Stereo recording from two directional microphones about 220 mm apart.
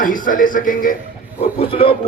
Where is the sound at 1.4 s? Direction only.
25° left (ahead or behind).